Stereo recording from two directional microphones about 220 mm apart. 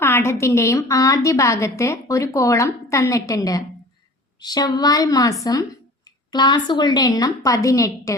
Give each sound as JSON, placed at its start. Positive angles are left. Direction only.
{"t": 0.0, "sound": "a woman's voice", "side_deg": 10}